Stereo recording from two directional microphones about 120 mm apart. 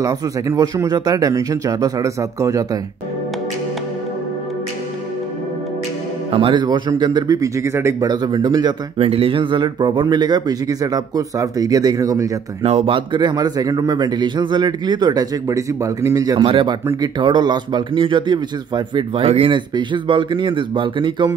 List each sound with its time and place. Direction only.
0.0 s speech: 30° right (ahead or behind)
6.3 s a man's voice: 45° right (ahead or behind); by 8.1 s 20° right (ahead or behind)
8.1 s a man's voice: 35° right (ahead or behind)
8.9 s a man's voice: 50° right (ahead or behind); by 12.3 s 30° right (ahead or behind)
12.6 s a man's voice: 55° right (ahead or behind); by 16.4 s 30° right (ahead or behind)
16.4 s a man's voice: 50° right (ahead or behind)
19.2 s speech: 55° right (ahead or behind)